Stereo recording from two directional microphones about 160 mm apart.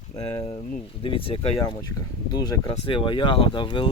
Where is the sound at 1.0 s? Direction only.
35° left (ahead or behind).